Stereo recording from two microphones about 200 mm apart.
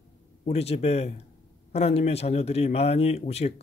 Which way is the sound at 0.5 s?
30° left (ahead or behind).